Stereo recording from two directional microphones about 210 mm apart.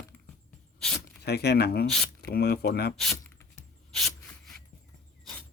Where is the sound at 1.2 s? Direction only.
50° left (ahead or behind).